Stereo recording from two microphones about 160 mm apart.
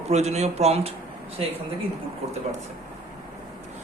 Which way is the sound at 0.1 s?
40° right (ahead or behind).